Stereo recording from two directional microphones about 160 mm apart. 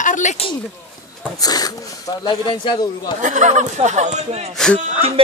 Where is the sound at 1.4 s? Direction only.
25° left (ahead or behind).